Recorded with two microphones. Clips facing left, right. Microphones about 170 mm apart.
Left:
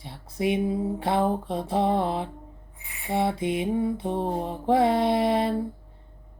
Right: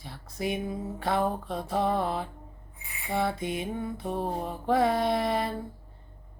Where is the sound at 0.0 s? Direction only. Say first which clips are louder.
Left 6 dB; 25° left (ahead or behind).